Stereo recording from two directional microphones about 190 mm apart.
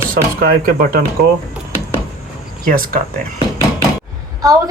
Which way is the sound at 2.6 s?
50° right (ahead or behind).